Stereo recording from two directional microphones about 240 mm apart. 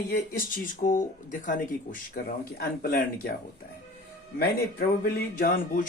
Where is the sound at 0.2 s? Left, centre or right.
Left.